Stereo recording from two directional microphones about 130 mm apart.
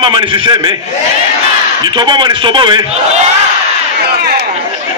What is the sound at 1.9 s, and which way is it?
Speech, 35° right (ahead or behind).